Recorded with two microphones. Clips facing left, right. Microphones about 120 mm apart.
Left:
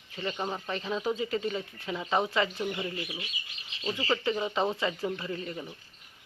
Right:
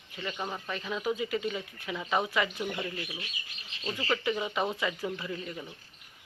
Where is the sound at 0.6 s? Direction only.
30° left (ahead or behind).